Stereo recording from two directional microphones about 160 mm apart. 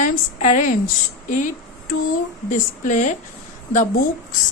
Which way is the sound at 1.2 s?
55° left (ahead or behind).